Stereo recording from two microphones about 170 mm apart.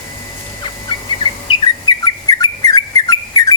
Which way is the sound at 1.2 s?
30° left (ahead or behind).